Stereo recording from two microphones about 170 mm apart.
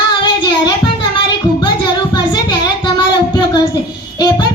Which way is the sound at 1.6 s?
25° left (ahead or behind).